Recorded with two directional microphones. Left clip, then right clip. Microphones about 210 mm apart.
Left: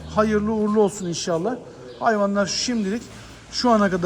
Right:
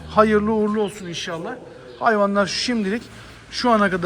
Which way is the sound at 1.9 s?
15° left (ahead or behind).